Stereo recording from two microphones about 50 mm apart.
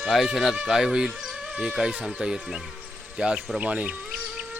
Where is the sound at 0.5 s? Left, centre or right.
Centre.